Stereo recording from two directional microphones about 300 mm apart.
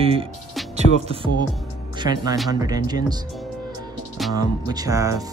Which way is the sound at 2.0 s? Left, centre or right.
Centre.